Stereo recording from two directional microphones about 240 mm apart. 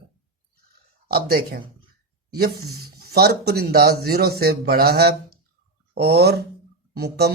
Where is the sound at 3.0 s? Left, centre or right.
Right.